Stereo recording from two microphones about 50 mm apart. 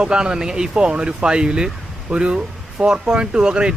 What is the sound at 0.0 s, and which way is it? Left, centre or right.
Speech, centre.